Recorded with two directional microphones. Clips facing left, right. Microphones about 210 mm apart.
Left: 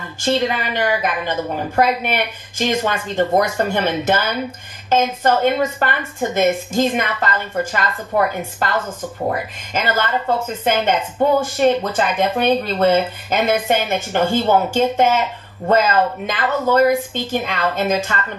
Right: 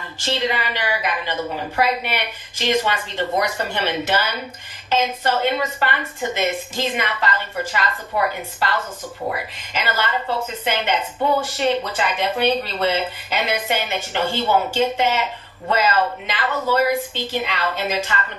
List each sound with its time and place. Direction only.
0.2 s speech: 50° left (ahead or behind)
9.9 s speech: 50° left (ahead or behind)